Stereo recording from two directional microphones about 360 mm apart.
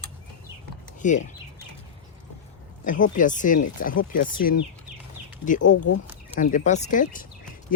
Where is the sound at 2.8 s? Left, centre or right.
Left.